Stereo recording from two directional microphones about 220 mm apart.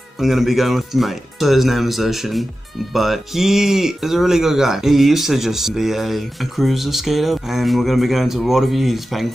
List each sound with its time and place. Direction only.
0.2 s speech: centre (ahead or behind)